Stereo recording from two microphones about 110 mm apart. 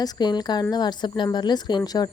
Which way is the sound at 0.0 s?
40° left (ahead or behind).